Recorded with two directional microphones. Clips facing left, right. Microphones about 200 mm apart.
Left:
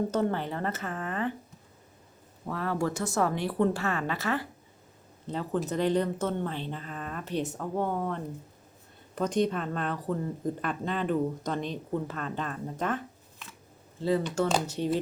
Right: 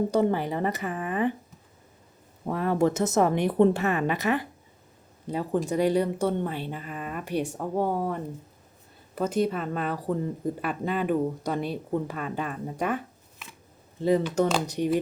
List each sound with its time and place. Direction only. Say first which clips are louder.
0.1 s speech: right 4 dB; 10° right (ahead or behind)
2.5 s a woman's voice: right 6 dB; 20° right (ahead or behind)
14.0 s speech: right 4 dB; 15° right (ahead or behind)